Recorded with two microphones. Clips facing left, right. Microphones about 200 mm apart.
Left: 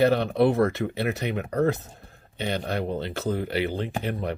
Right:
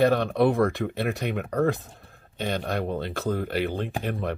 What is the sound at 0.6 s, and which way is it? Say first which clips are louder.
Speech: left 1 dB; centre (ahead or behind).